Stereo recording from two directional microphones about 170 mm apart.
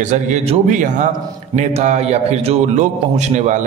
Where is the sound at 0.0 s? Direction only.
45° right (ahead or behind).